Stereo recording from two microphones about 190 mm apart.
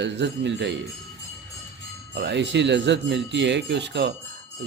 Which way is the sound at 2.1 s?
65° right (ahead or behind).